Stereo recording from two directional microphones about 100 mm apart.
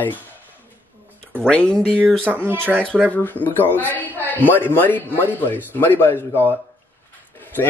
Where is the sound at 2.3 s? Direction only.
20° right (ahead or behind).